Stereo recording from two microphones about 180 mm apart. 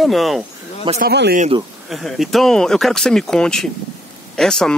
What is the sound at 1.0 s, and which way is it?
Speech, 65° right (ahead or behind).